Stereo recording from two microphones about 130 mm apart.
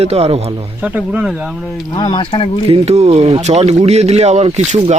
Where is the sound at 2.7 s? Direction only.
55° right (ahead or behind).